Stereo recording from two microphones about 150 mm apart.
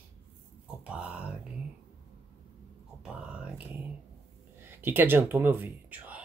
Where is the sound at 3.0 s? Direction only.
5° right (ahead or behind).